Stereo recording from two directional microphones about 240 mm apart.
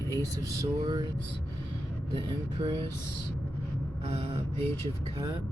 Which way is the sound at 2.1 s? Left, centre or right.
Centre.